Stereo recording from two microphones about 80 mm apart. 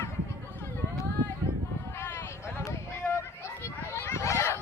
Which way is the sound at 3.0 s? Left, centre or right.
Centre.